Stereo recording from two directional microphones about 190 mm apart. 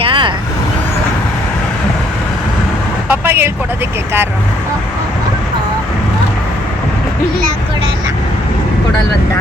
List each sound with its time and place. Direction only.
0.0 s vehicle: 25° right (ahead or behind)
3.1 s vehicle: 10° right (ahead or behind)